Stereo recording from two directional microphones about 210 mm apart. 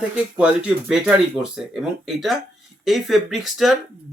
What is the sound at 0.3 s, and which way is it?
Speech, 5° right (ahead or behind).